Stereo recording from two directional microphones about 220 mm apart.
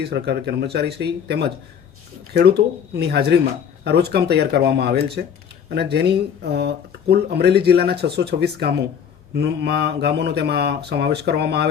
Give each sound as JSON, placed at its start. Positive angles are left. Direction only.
{"t": 0.0, "sound": "speech", "side_deg": -50}